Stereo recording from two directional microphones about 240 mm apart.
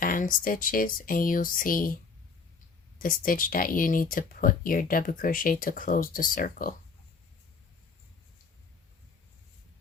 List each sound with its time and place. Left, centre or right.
0.0 s speech: left
3.0 s speech: left